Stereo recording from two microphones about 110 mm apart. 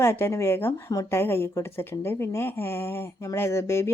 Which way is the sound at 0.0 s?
20° left (ahead or behind).